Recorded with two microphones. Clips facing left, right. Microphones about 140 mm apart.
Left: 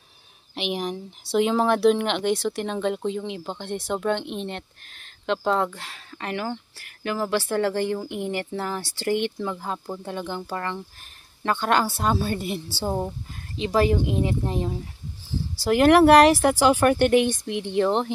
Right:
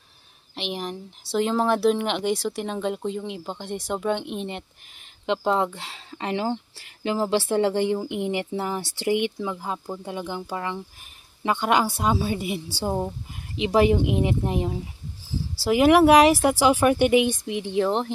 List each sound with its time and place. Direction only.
0.6 s speech: 5° left (ahead or behind)
13.6 s speech: 20° right (ahead or behind); by 18.1 s centre (ahead or behind)